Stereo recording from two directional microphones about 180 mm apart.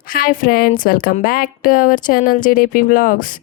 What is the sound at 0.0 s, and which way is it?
A woman's voice, 50° left (ahead or behind).